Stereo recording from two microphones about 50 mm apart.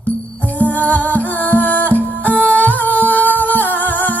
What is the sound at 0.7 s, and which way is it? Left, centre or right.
Music, left.